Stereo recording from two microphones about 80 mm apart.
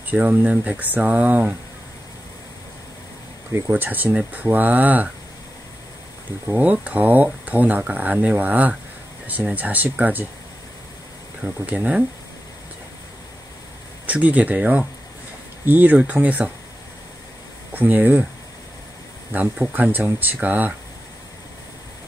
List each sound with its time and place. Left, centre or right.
0.0 s speech: centre
3.5 s speech: right
6.4 s speech: centre
11.4 s speech: centre
14.0 s speech: centre
17.7 s speech: right
19.3 s speech: right